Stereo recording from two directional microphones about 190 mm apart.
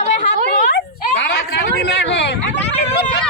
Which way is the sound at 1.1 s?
70° left (ahead or behind).